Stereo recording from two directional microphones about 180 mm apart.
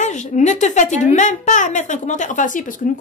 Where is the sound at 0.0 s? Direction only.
40° left (ahead or behind).